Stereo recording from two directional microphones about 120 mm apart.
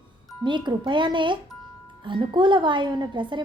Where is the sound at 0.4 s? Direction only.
40° right (ahead or behind).